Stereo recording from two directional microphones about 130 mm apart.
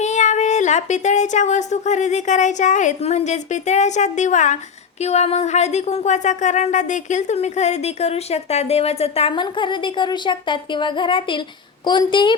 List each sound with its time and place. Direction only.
0.0 s a woman's voice: 65° left (ahead or behind); by 12.3 s 35° left (ahead or behind)